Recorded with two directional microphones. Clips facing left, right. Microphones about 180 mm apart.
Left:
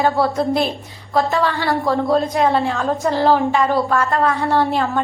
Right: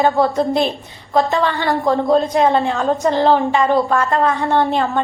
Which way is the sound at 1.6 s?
20° right (ahead or behind).